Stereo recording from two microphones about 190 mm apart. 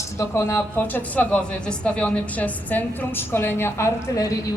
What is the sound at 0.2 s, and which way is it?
A woman's voice, 15° left (ahead or behind).